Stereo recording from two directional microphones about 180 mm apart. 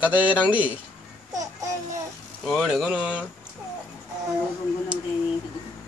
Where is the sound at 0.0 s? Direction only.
10° right (ahead or behind).